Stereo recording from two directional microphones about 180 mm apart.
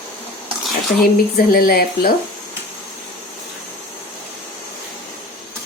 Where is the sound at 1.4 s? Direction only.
55° left (ahead or behind).